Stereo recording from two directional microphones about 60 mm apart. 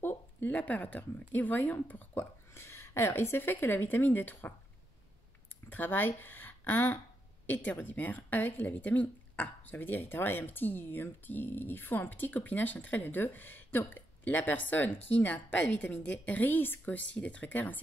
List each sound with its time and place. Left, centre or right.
0.0 s a woman's voice: left
2.5 s speech: left
5.7 s speech: left